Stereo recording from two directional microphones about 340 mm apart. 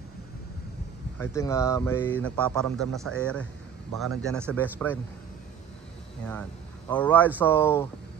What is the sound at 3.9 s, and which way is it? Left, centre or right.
Speech, right.